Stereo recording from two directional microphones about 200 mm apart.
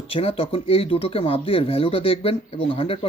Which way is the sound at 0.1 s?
30° left (ahead or behind).